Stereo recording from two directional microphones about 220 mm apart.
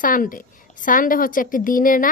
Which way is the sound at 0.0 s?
40° left (ahead or behind).